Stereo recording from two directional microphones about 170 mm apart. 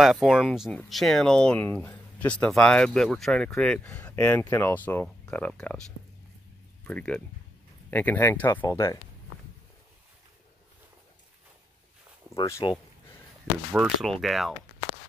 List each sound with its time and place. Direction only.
0.0 s speech: centre (ahead or behind); by 8.9 s 15° left (ahead or behind)
12.4 s speech: 20° left (ahead or behind)
13.7 s speech: centre (ahead or behind)